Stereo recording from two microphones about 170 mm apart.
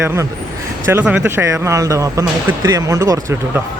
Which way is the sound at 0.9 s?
10° right (ahead or behind).